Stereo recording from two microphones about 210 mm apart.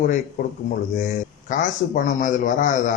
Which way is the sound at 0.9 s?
35° left (ahead or behind).